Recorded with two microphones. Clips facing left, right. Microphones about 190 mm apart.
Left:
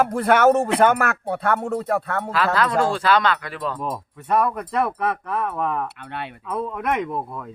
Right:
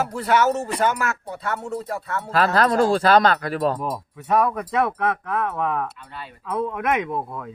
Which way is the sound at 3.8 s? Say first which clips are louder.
Even; 5° right (ahead or behind).